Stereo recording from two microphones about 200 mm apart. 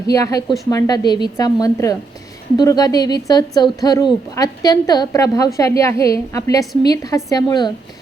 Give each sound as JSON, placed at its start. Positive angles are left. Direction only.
{"t": 0.1, "sound": "a woman's voice", "side_deg": 15}